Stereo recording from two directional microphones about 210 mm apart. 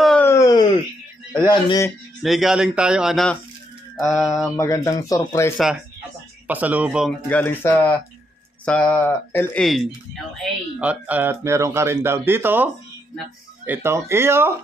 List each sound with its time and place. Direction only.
0.0 s a sound: 5° left (ahead or behind)
1.4 s speech: 20° left (ahead or behind)
2.2 s speech: centre (ahead or behind)
4.6 s speech: 15° left (ahead or behind)
6.4 s speech: 10° right (ahead or behind)
7.2 s speech: 10° left (ahead or behind); by 12.6 s 10° right (ahead or behind)
13.7 s speech: 10° right (ahead or behind)